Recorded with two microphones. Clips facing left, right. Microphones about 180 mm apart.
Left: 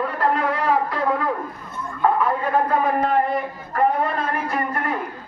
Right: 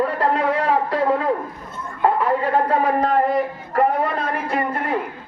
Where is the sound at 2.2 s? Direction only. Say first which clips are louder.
Right 2 dB; 30° right (ahead or behind).